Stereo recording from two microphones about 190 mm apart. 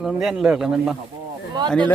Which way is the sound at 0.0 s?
5° right (ahead or behind).